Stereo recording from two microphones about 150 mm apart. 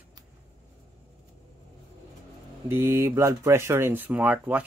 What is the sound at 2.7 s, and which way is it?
Speech, 15° right (ahead or behind).